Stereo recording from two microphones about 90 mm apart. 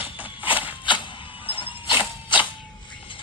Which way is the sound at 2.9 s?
70° left (ahead or behind).